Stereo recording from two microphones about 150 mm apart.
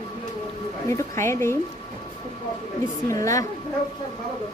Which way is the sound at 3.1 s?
20° left (ahead or behind).